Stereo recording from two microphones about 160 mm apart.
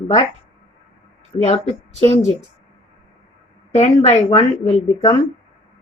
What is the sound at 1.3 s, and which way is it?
Speech, 30° left (ahead or behind).